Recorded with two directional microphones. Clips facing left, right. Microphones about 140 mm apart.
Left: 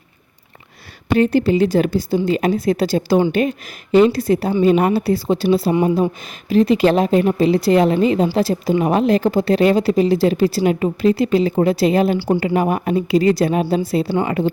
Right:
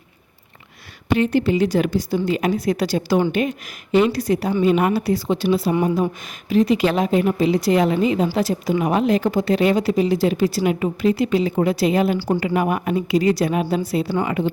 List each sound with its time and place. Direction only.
1.1 s a woman's voice: 40° left (ahead or behind)